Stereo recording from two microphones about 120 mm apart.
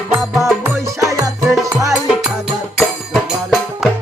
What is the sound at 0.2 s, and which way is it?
Music, centre (ahead or behind).